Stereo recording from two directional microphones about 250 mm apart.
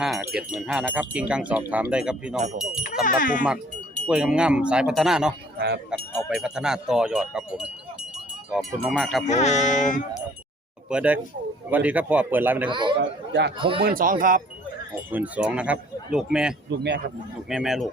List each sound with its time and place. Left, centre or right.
0.0 s speech: centre
3.0 s speech: left
4.0 s speech: centre
5.5 s a sound: right
5.9 s speech: centre
9.2 s speech: left
10.8 s speech: centre
12.7 s a man's voice: centre
13.0 s speech: right
13.6 s speech: right
13.8 s speech: right
15.1 s speech: centre
16.6 s speech: right
17.5 s speech: centre